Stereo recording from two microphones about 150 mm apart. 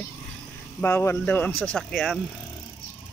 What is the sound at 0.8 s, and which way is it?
Speech, 15° left (ahead or behind).